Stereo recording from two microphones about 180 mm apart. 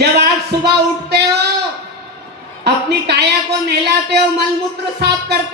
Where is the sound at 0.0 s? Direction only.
65° right (ahead or behind).